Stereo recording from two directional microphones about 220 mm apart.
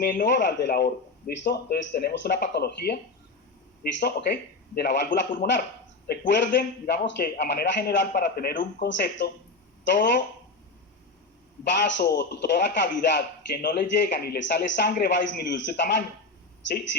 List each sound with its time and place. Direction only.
0.0 s speech: 40° left (ahead or behind)
4.0 s speech: 45° left (ahead or behind)
11.8 s speech: 50° left (ahead or behind)